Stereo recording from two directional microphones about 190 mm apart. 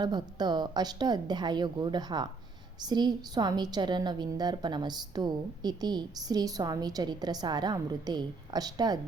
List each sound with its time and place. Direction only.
0.0 s a woman's voice: 20° right (ahead or behind)